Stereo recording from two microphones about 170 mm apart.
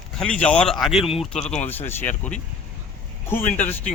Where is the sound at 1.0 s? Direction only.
35° left (ahead or behind).